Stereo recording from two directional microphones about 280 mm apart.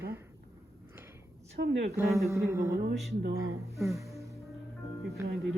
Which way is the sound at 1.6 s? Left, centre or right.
Right.